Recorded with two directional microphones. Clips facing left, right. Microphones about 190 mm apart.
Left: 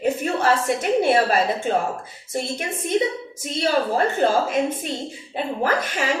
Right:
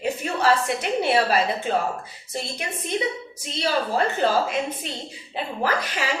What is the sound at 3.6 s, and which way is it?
A woman's voice, 50° left (ahead or behind).